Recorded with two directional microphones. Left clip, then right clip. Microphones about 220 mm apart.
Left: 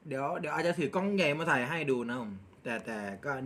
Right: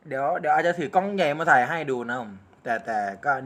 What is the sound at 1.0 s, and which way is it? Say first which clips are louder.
Speech: right 7 dB; 15° left (ahead or behind).